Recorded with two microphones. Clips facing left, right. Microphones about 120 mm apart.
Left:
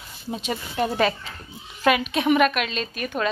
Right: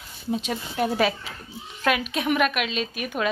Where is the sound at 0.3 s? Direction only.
Centre (ahead or behind).